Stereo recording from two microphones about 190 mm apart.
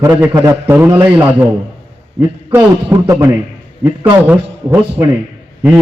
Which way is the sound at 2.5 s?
10° right (ahead or behind).